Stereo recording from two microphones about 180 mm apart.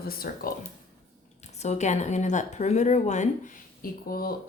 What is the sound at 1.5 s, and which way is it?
A woman's voice, 40° left (ahead or behind).